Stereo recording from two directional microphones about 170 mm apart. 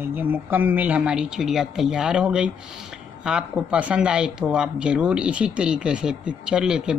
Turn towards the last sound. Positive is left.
turn(degrees=-5)  # may be behind; listen again after turning